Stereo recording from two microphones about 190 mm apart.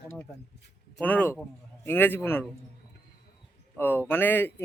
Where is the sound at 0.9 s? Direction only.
10° left (ahead or behind).